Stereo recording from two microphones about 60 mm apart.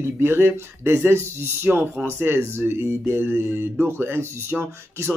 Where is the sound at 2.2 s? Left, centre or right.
Right.